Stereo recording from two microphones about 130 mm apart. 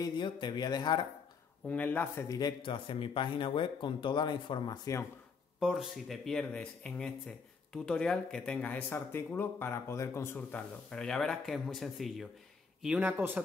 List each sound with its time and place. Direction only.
0.0 s speech: 35° left (ahead or behind)
1.7 s speech: 10° left (ahead or behind)
2.2 s speech: 30° left (ahead or behind)
5.6 s speech: centre (ahead or behind)
12.8 s speech: 10° right (ahead or behind)